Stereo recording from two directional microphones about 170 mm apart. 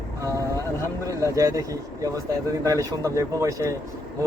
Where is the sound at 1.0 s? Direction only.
20° right (ahead or behind).